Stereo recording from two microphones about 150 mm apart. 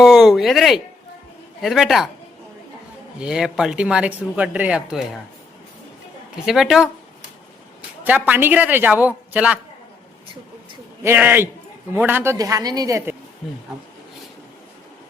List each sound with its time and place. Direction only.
0.0 s a sound: centre (ahead or behind)
1.6 s speech: centre (ahead or behind)
3.2 s speech: 5° right (ahead or behind)
6.4 s speech: 5° right (ahead or behind)
8.0 s a man's voice: 10° right (ahead or behind)
11.0 s a man's voice: 15° right (ahead or behind)